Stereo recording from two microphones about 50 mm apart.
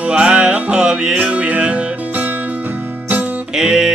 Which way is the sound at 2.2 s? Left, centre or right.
Right.